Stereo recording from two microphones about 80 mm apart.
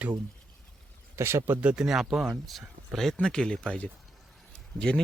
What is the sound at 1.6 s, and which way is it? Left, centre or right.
Speech, centre.